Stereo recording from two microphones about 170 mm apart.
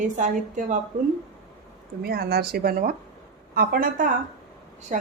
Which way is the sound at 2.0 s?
65° right (ahead or behind).